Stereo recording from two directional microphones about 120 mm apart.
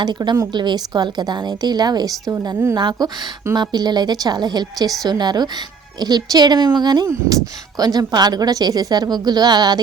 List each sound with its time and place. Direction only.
0.0 s a woman's voice: 35° right (ahead or behind)